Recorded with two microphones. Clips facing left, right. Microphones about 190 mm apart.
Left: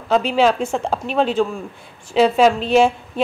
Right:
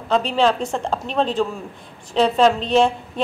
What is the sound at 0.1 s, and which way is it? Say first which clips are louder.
A woman's voice: left 2 dB; 5° left (ahead or behind).